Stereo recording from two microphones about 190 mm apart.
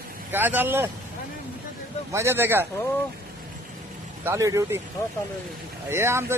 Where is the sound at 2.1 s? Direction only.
10° right (ahead or behind).